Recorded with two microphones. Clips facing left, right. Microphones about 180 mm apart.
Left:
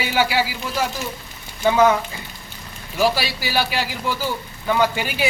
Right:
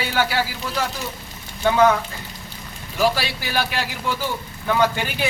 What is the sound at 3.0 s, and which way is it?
Speech, 5° left (ahead or behind).